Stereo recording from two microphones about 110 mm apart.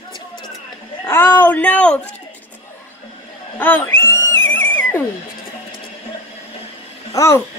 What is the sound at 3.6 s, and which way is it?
Speech, 20° left (ahead or behind).